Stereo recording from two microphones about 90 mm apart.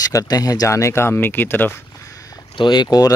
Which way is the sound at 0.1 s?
45° left (ahead or behind).